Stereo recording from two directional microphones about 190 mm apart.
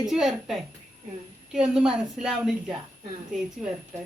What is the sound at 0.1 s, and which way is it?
A woman's voice, centre (ahead or behind).